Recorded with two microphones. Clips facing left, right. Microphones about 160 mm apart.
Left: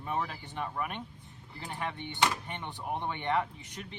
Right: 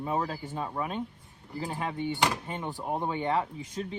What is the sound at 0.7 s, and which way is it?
Speech, 25° right (ahead or behind).